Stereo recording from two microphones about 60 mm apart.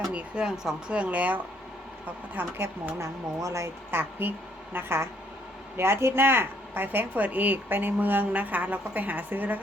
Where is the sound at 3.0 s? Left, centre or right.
Right.